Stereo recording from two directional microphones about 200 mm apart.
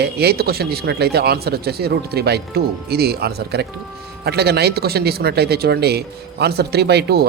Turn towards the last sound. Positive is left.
turn(degrees=-55)  # may be behind; listen again after turning